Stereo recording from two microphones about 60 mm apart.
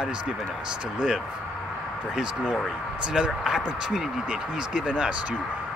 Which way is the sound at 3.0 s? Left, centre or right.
Centre.